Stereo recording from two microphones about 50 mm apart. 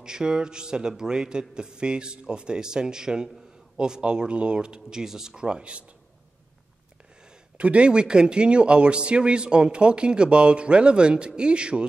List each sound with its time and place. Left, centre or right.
0.0 s a man's voice: centre
7.5 s speech: right